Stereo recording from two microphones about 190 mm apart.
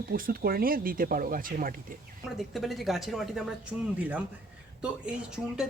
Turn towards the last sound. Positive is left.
turn(degrees=-5)  # may be behind; listen again after turning